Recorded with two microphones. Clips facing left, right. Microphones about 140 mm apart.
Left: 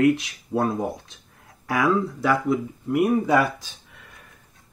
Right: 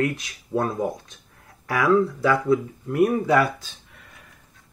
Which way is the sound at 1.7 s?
20° left (ahead or behind).